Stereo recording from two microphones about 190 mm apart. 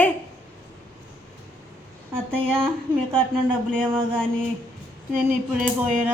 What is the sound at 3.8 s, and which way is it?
Mantra, 25° right (ahead or behind).